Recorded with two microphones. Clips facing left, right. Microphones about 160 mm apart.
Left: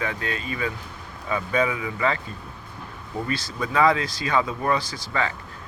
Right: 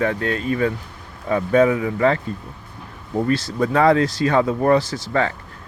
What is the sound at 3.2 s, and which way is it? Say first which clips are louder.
Speech: right 9 dB; 65° right (ahead or behind).